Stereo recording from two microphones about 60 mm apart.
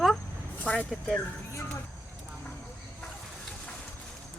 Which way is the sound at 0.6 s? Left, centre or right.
Left.